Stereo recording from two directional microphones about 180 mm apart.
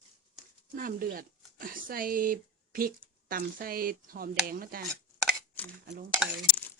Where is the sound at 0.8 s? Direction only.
55° right (ahead or behind).